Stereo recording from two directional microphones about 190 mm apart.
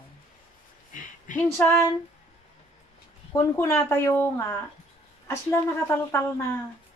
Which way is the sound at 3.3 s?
15° left (ahead or behind).